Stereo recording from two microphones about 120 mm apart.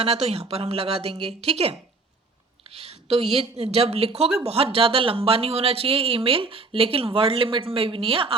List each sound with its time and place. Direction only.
0.0 s speech: 60° right (ahead or behind)
2.7 s a woman's voice: 60° right (ahead or behind)